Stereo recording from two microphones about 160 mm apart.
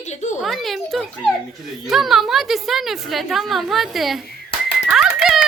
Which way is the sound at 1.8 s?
Centre (ahead or behind).